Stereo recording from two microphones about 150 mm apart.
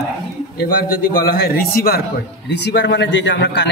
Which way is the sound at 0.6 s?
80° left.